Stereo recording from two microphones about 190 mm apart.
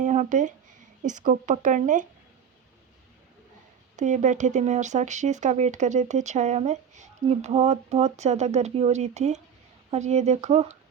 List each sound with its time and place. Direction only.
0.0 s a sound: 40° right (ahead or behind)
1.0 s speech: 40° right (ahead or behind)
3.9 s speech: 40° right (ahead or behind)